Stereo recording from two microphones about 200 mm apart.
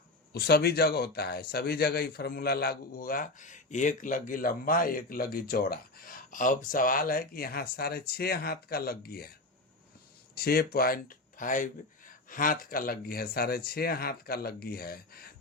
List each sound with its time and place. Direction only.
0.3 s speech: 55° left (ahead or behind)
10.3 s speech: 50° left (ahead or behind)